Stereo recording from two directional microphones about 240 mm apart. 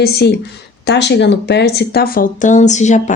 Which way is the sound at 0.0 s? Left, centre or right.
Left.